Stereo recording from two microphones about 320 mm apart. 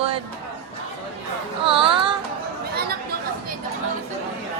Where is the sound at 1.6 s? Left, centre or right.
Centre.